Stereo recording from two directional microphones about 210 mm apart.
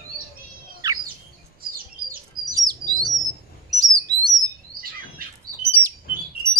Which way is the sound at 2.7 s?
20° right (ahead or behind).